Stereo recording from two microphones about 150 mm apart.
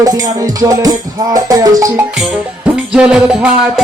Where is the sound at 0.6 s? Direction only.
25° right (ahead or behind).